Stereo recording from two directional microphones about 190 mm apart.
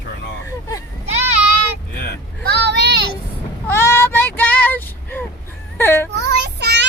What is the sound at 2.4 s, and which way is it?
Vehicle, 60° right (ahead or behind).